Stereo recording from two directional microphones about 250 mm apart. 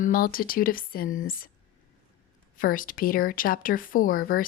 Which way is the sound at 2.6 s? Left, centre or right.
Left.